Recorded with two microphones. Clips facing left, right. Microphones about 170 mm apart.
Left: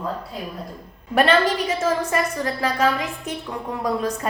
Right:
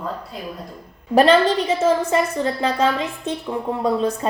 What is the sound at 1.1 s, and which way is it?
A woman's voice, 30° right (ahead or behind).